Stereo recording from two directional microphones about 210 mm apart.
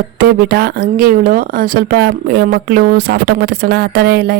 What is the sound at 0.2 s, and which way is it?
Speech, 45° right (ahead or behind).